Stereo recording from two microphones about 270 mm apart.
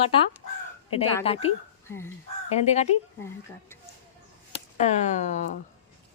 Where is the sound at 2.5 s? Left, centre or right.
Left.